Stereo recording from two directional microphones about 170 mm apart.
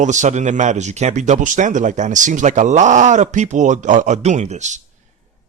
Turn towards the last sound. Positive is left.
turn(degrees=-45)  # may be behind; listen again after turning